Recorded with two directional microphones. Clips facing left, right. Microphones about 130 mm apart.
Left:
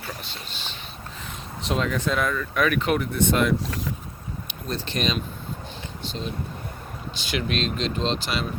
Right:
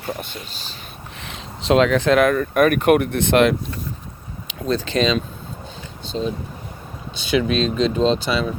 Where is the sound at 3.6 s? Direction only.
90° left.